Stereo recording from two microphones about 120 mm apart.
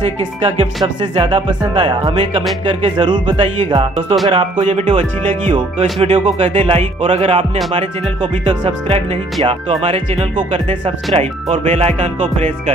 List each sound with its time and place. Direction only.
1.1 s speech: 50° right (ahead or behind)
4.3 s speech: 60° right (ahead or behind)